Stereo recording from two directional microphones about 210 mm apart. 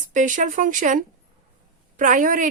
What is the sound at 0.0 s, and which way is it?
Speech, 35° right (ahead or behind).